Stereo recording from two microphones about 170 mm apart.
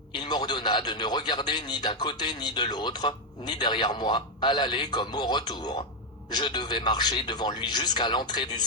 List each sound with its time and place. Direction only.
0.2 s a man's voice: 25° left (ahead or behind)